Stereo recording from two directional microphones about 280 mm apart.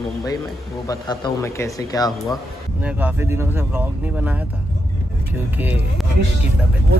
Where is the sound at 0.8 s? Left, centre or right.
Centre.